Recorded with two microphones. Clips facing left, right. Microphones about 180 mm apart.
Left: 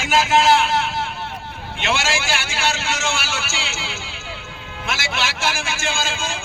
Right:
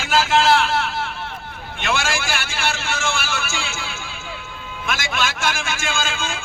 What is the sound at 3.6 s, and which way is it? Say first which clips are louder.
Music: even; 55° right (ahead or behind).